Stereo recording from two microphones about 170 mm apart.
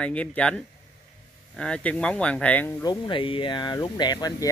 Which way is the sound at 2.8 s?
25° left (ahead or behind).